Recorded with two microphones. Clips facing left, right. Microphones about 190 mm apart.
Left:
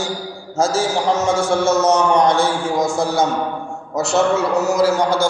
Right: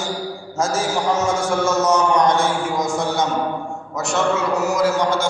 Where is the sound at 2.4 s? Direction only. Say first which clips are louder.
Left 2 dB; 30° left (ahead or behind).